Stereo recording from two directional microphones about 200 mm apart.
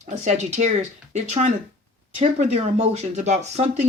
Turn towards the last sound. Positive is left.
turn(degrees=-35)  # may be behind; listen again after turning